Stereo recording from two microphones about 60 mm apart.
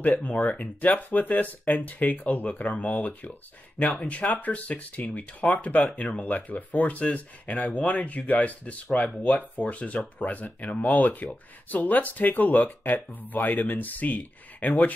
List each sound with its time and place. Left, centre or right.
0.0 s speech: left
8.8 s speech: centre